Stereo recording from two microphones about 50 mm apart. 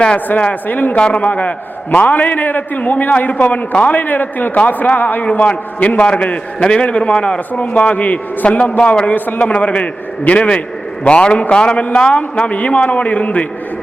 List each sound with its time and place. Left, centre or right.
0.7 s a man's voice: left
0.9 s a man's voice: left
9.5 s a man's voice: left